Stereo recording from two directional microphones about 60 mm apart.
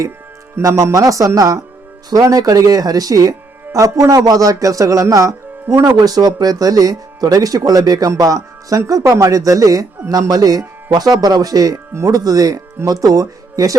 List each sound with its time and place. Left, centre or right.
0.7 s speech: right
0.9 s speech: right
2.0 s speech: right
6.1 s speech: right
9.0 s speech: right
10.1 s speech: right